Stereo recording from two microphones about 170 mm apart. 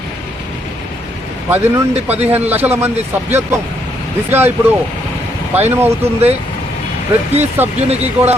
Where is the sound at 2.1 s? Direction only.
40° right (ahead or behind).